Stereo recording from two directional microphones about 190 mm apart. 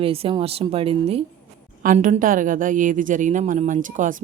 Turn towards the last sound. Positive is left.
turn(degrees=-45)  # may be behind; listen again after turning